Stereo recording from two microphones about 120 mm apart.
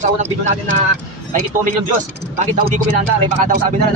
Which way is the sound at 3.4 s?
90° right.